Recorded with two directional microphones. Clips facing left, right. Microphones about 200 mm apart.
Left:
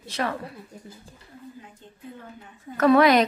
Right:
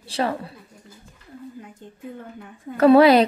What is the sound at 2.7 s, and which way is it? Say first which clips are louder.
Speech: right 4 dB; 30° right (ahead or behind).